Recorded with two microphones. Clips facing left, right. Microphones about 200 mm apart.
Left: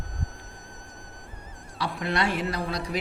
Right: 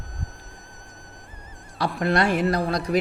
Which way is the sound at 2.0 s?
45° right (ahead or behind).